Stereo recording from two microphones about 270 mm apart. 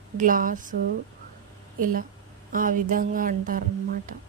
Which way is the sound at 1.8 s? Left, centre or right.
Right.